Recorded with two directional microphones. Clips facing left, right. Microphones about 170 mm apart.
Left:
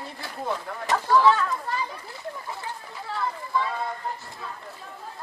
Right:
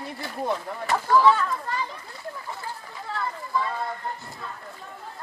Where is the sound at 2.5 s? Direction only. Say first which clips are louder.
Even; 5° left (ahead or behind).